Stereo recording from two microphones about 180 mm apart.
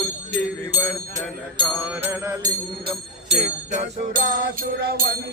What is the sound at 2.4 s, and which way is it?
Speech, 30° right (ahead or behind).